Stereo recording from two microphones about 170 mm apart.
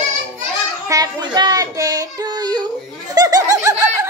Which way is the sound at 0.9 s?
25° right (ahead or behind).